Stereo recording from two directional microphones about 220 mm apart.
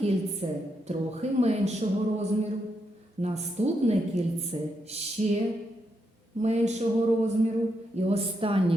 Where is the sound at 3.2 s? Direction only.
30° right (ahead or behind).